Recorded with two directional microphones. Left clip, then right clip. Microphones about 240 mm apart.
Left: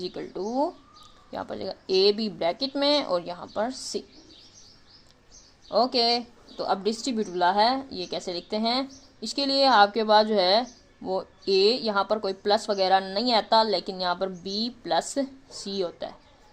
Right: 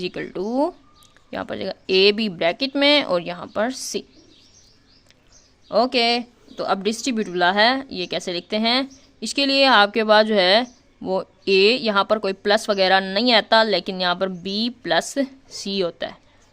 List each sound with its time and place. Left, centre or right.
0.0 s a woman's voice: right
3.7 s speech: right
5.6 s a woman's voice: right